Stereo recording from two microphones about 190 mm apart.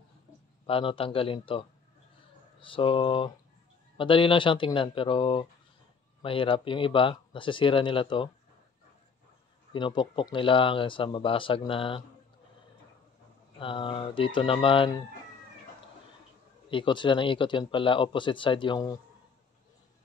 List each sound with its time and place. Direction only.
0.7 s speech: 30° left (ahead or behind)
9.7 s speech: 25° left (ahead or behind)
13.6 s speech: 25° left (ahead or behind)
16.7 s speech: 25° left (ahead or behind)